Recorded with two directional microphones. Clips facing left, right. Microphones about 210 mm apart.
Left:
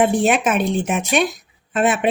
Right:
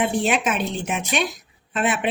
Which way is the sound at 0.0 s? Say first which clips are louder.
Left 5 dB; 50° left (ahead or behind).